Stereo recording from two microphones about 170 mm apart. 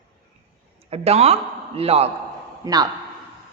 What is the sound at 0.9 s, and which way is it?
A woman's voice, 35° right (ahead or behind).